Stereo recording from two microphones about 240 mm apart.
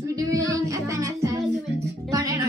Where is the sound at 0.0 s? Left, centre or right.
Centre.